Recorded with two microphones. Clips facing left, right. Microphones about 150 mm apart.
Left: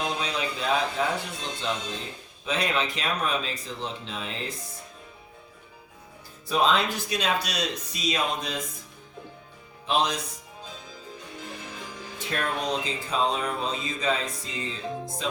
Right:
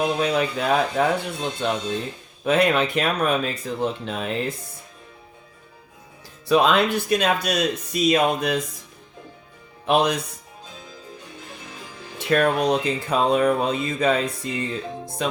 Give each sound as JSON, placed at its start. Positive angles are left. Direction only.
{"t": 0.2, "sound": "speech", "side_deg": -55}
{"t": 6.5, "sound": "speech", "side_deg": -65}
{"t": 9.8, "sound": "speech", "side_deg": -60}
{"t": 12.2, "sound": "speech", "side_deg": -70}
{"t": 15.2, "sound": "music", "side_deg": -65}